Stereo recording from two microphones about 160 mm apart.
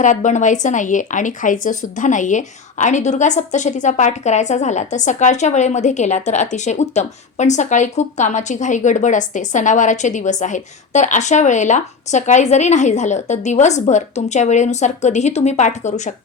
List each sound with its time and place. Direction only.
0.0 s speech: 50° left (ahead or behind)